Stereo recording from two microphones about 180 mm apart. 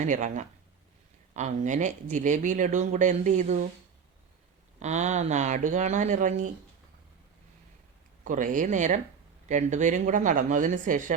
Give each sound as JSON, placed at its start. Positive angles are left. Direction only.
{"t": 0.0, "sound": "speech", "side_deg": -45}
{"t": 4.8, "sound": "speech", "side_deg": -40}
{"t": 8.2, "sound": "speech", "side_deg": -45}